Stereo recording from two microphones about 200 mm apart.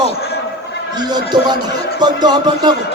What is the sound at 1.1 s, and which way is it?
Speech, 20° right (ahead or behind).